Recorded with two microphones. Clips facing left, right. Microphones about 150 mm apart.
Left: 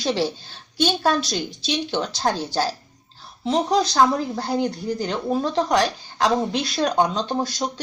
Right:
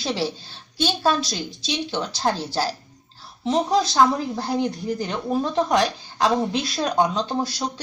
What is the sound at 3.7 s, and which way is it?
Speech, 5° right (ahead or behind).